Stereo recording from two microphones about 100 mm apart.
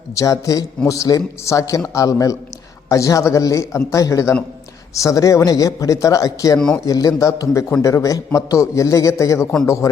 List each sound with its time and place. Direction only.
0.1 s a man's voice: 35° left (ahead or behind)